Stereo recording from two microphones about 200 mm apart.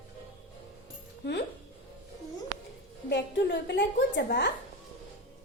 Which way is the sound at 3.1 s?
60° left (ahead or behind).